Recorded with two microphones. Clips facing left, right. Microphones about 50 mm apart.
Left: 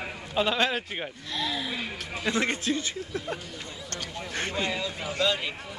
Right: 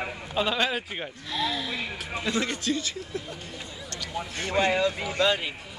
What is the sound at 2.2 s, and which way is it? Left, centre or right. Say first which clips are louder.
A man's voice: left 1 dB; left.